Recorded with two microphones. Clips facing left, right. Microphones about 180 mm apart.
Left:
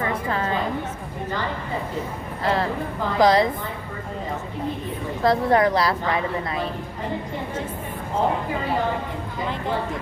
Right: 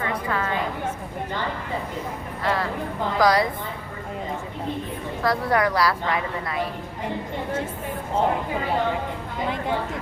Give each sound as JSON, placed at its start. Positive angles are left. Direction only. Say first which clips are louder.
{"t": 0.0, "sound": "a sound", "louder": "left 2 dB", "side_deg": 30}
{"t": 2.4, "sound": "a woman's voice", "louder": "left 2 dB", "side_deg": 25}
{"t": 5.2, "sound": "a woman's voice", "louder": "left 4 dB", "side_deg": 25}